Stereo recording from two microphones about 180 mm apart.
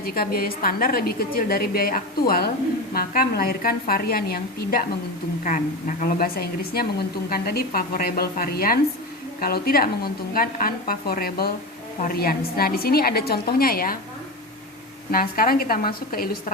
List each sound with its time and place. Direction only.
0.0 s a woman's voice: 55° left (ahead or behind)
5.4 s a woman's voice: 45° left (ahead or behind)
15.1 s a woman's voice: 50° left (ahead or behind)